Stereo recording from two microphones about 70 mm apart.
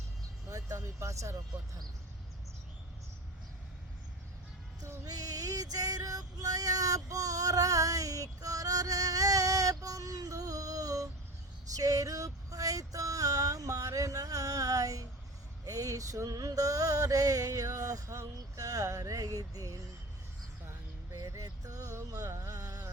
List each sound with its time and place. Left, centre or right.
0.4 s vehicle: right
4.8 s female singing: right
11.7 s a sound: right
15.6 s mantra: right
21.2 s a sound: right
21.4 s music: right